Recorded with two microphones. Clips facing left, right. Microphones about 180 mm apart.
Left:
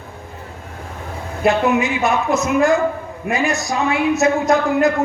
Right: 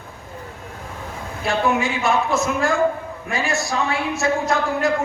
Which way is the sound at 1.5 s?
20° left (ahead or behind).